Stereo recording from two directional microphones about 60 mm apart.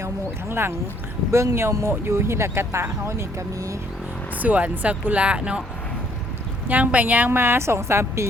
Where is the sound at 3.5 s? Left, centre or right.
Right.